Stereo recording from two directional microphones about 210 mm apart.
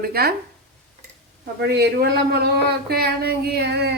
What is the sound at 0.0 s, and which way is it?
Speech, 45° right (ahead or behind).